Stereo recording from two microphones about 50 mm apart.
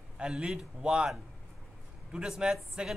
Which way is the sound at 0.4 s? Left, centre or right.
Centre.